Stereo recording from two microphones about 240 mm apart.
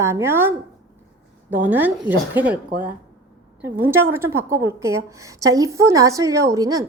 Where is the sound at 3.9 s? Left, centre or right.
Right.